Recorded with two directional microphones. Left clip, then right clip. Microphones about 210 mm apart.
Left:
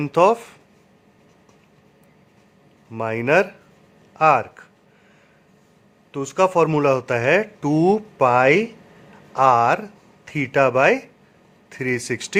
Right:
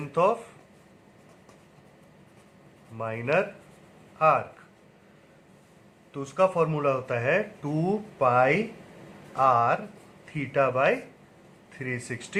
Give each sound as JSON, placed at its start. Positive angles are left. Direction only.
{"t": 0.0, "sound": "speech", "side_deg": 50}
{"t": 2.9, "sound": "speech", "side_deg": 50}
{"t": 6.1, "sound": "speech", "side_deg": 50}